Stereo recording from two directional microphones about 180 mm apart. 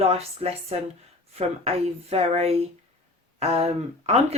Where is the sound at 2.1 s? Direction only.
35° right (ahead or behind).